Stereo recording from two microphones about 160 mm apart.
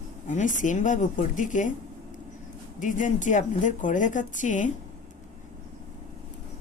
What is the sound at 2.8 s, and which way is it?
A woman's voice, 50° left (ahead or behind).